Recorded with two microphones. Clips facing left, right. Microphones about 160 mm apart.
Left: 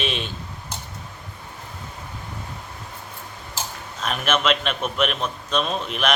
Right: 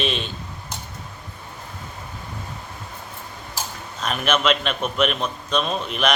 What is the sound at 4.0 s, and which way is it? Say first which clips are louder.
A man's voice: right 1 dB; centre (ahead or behind).